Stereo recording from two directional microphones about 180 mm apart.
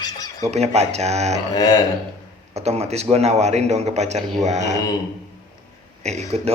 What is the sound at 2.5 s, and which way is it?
A man's voice, 35° right (ahead or behind).